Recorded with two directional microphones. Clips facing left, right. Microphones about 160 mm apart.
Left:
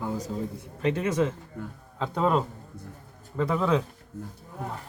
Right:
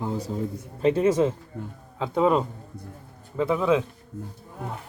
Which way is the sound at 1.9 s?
5° right (ahead or behind).